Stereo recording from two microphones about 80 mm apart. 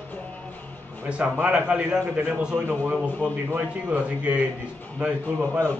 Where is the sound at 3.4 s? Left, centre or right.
Right.